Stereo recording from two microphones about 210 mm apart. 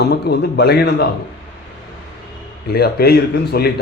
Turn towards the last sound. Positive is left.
turn(degrees=50)  # may be behind; listen again after turning